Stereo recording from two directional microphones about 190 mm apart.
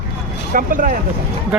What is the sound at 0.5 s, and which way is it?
Vehicle, 45° right (ahead or behind).